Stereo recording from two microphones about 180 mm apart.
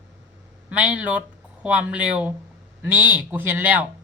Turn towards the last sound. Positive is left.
turn(degrees=-10)  # may be behind; listen again after turning